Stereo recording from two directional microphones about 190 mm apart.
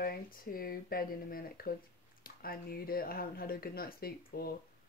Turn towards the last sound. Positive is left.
turn(degrees=50)  # may be behind; listen again after turning